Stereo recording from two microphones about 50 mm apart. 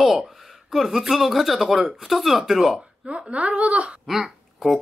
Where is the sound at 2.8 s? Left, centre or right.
Right.